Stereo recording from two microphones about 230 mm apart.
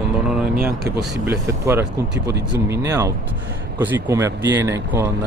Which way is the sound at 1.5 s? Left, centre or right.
Centre.